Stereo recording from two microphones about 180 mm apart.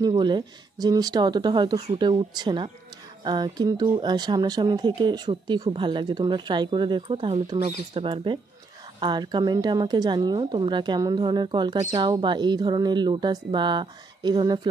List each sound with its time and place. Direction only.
0.1 s a woman's voice: 25° right (ahead or behind)